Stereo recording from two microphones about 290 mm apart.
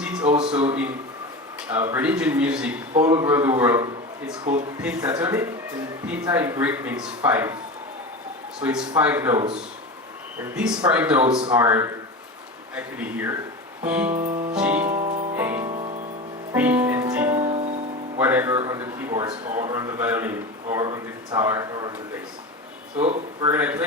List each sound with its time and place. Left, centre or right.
0.0 s a sound: centre
0.5 s a man's voice: centre
8.6 s a man's voice: centre
14.1 s music: right
14.5 s speech: centre
14.9 s music: right
15.4 s a man's voice: centre
15.6 s music: right
16.5 s music: centre
17.4 s music: right
18.2 s a man's voice: centre
23.0 s speech: right
23.5 s a man's voice: centre